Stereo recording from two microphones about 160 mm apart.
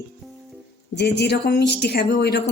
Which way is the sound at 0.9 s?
90° left.